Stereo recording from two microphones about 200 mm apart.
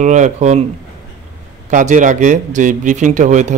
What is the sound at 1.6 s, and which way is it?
A man's voice, 40° right (ahead or behind).